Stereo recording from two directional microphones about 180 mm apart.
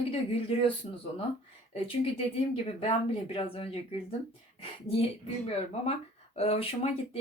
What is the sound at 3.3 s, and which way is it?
Speech, 30° left (ahead or behind).